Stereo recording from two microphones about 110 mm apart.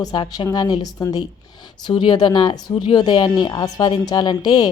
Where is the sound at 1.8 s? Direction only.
45° left (ahead or behind).